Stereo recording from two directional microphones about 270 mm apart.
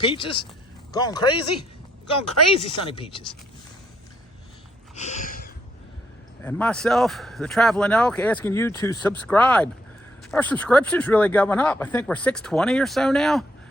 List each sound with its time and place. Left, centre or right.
0.0 s speech: centre
2.6 s speech: centre
4.9 s a sound: left
6.4 s a man's voice: centre